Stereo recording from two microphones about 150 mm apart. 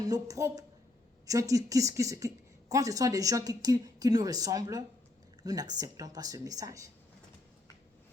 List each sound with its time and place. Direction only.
0.0 s a woman's voice: 25° right (ahead or behind)